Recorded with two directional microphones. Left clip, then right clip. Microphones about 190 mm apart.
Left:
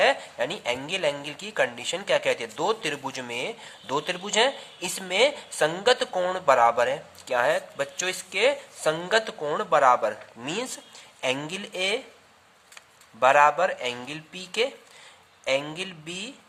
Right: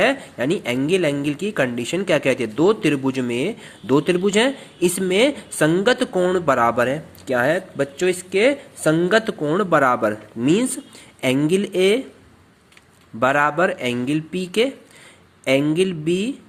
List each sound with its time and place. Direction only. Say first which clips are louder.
0.0 s speech: right 3 dB; 15° right (ahead or behind)
6.1 s speech: right 7 dB; 5° right (ahead or behind)
6.4 s speech: left 2 dB; 15° right (ahead or behind)
13.1 s speech: right 1 dB; 15° right (ahead or behind)